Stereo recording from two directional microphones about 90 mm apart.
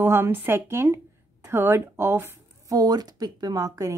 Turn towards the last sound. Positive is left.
turn(degrees=-40)  # may be behind; listen again after turning